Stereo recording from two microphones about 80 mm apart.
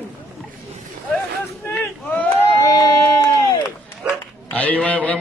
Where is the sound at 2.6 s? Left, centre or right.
Left.